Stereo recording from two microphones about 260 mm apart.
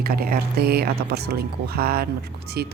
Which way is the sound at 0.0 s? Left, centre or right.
Right.